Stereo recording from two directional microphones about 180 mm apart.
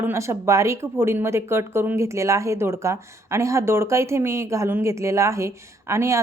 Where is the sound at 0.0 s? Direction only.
15° right (ahead or behind).